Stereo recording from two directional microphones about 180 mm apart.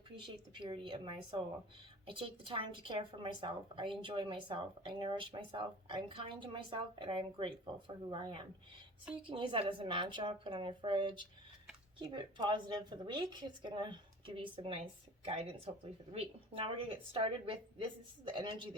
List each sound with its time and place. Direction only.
0.2 s a woman's voice: 25° right (ahead or behind)